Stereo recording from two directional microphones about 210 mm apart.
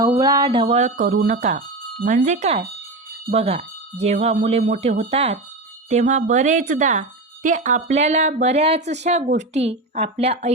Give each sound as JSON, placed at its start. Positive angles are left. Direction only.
{"t": 0.0, "sound": "speech", "side_deg": -15}